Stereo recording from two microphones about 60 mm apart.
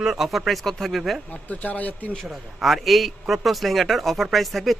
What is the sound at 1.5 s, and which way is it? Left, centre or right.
Speech, left.